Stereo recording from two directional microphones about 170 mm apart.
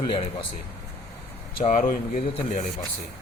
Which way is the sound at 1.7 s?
55° left (ahead or behind).